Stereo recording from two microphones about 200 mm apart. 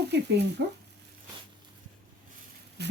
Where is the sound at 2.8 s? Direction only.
55° right (ahead or behind).